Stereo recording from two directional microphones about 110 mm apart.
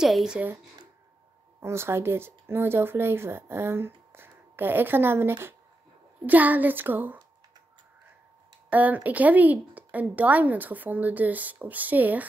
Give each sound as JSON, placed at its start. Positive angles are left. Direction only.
{"t": 0.0, "sound": "speech", "side_deg": -5}
{"t": 1.6, "sound": "speech", "side_deg": -25}
{"t": 8.6, "sound": "speech", "side_deg": -15}